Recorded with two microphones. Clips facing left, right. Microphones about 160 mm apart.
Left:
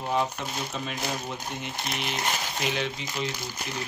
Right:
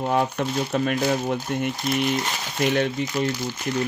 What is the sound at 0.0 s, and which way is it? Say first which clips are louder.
Speech: right 5 dB; 55° right (ahead or behind).